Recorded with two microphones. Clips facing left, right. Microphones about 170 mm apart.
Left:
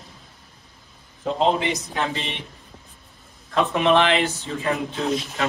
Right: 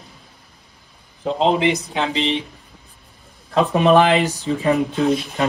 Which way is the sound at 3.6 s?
35° right (ahead or behind).